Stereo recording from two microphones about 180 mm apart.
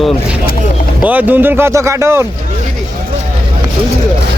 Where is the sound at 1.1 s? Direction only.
10° right (ahead or behind).